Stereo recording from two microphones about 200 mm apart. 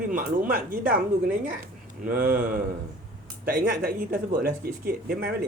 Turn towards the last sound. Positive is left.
turn(degrees=-45)  # may be behind; listen again after turning